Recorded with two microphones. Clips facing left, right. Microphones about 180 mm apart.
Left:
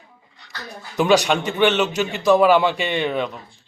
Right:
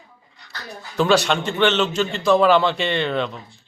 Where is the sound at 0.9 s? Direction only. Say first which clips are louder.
Left 1 dB; 15° left (ahead or behind).